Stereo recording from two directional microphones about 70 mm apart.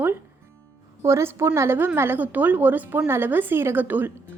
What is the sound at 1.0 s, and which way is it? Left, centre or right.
A woman's voice, right.